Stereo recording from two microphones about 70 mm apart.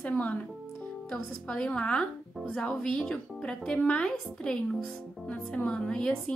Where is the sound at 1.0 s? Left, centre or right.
Centre.